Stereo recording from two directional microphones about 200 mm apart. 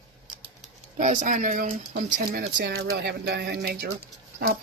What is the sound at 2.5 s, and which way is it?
Speech, 55° right (ahead or behind).